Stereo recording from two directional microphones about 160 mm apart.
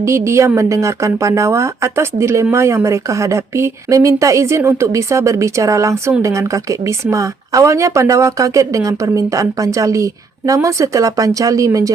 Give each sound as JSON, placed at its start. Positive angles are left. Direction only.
{"t": 0.0, "sound": "a woman's voice", "side_deg": -15}